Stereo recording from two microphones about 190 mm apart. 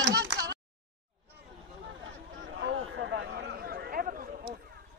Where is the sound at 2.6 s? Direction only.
70° right (ahead or behind); by 4.3 s 50° right (ahead or behind).